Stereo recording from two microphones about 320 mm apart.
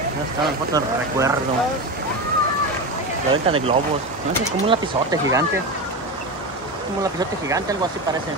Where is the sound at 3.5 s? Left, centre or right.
Centre.